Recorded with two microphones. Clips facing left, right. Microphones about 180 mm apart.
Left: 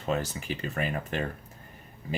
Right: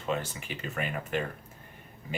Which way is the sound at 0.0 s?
40° left (ahead or behind).